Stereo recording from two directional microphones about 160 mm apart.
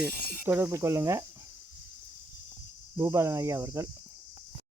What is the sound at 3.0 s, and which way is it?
Speech, 20° right (ahead or behind).